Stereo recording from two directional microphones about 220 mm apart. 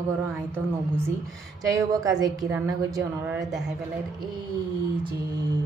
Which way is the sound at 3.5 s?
Centre (ahead or behind).